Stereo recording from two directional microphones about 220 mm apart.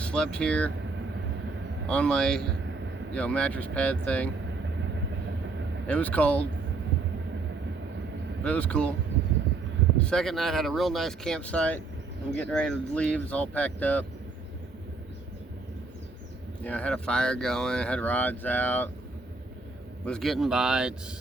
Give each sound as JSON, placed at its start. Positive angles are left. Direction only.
{"t": 0.0, "sound": "speech", "side_deg": 5}
{"t": 1.9, "sound": "speech", "side_deg": 5}
{"t": 5.9, "sound": "speech", "side_deg": 5}
{"t": 8.4, "sound": "speech", "side_deg": 5}
{"t": 10.0, "sound": "speech", "side_deg": 5}
{"t": 16.6, "sound": "speech", "side_deg": 5}
{"t": 20.1, "sound": "speech", "side_deg": 0}